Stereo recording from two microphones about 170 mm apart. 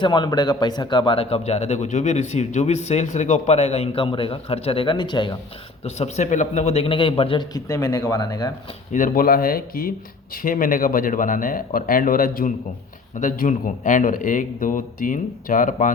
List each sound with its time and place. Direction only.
0.0 s a man's voice: 25° left (ahead or behind)
5.8 s a man's voice: 40° left (ahead or behind); by 8.5 s 20° left (ahead or behind)
8.9 s a man's voice: 55° left (ahead or behind)